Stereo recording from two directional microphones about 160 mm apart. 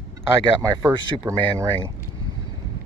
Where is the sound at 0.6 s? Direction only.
25° right (ahead or behind).